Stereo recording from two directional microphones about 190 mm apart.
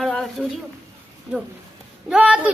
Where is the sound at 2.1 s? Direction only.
5° right (ahead or behind).